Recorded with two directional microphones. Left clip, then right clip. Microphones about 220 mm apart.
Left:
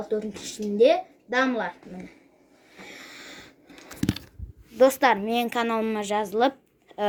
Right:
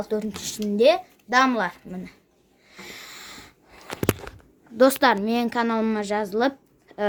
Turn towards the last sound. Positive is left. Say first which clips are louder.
# even
turn(degrees=-15)  # may be behind; listen again after turning